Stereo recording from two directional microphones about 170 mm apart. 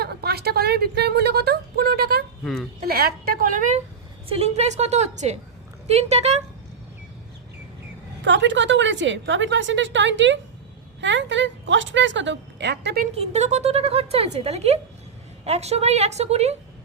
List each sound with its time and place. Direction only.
0.0 s speech: 65° right (ahead or behind)
2.4 s speech: 5° left (ahead or behind)
2.8 s a woman's voice: 65° right (ahead or behind)
4.3 s a woman's voice: 40° right (ahead or behind)
8.2 s a woman's voice: 90° right
13.1 s a woman's voice: 40° right (ahead or behind)